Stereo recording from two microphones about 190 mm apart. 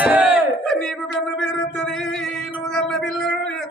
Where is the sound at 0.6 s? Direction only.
5° left (ahead or behind).